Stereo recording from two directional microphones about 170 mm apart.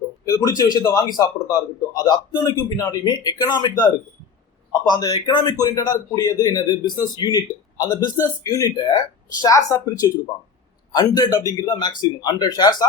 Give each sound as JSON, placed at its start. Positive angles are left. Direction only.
{"t": 0.3, "sound": "a man's voice", "side_deg": 20}